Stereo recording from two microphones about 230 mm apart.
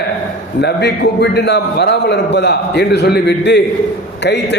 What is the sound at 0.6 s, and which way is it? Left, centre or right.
A man's voice, left.